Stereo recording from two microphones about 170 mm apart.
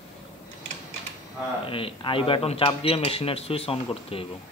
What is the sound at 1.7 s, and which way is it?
Speech, 30° left (ahead or behind).